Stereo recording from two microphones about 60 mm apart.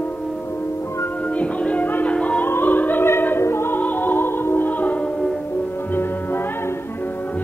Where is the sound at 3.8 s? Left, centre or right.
Left.